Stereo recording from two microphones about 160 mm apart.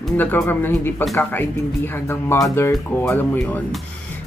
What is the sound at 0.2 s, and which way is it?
Speech, 10° left (ahead or behind).